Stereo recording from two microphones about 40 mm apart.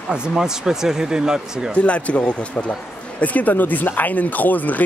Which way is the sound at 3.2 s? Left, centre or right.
Left.